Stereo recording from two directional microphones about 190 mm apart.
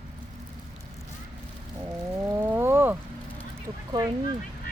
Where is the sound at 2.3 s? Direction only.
10° right (ahead or behind).